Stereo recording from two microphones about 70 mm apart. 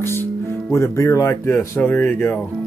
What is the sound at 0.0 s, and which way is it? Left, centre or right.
Music, left.